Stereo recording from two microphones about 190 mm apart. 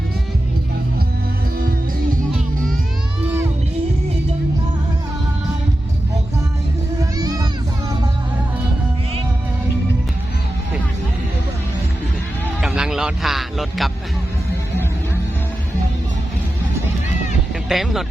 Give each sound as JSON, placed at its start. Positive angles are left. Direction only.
{"t": 3.2, "sound": "music", "side_deg": -10}
{"t": 7.0, "sound": "music", "side_deg": -20}
{"t": 12.6, "sound": "a sound", "side_deg": -5}
{"t": 17.7, "sound": "music", "side_deg": 0}